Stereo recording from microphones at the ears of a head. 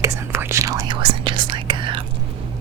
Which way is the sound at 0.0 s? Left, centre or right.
Right.